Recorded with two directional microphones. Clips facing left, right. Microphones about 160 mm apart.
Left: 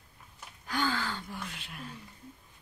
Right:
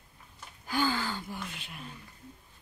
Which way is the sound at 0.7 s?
5° right (ahead or behind).